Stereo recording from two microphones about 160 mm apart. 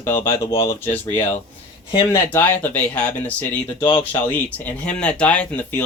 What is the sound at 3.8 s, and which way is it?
Speech, 30° left (ahead or behind).